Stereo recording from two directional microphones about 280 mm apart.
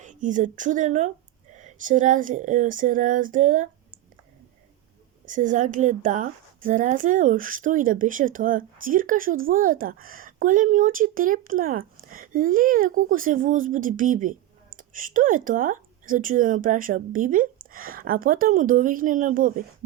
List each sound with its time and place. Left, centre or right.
0.0 s speech: right
5.2 s a woman's voice: right